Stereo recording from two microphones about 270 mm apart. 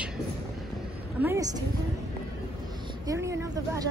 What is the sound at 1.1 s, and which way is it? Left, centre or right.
Speech, centre.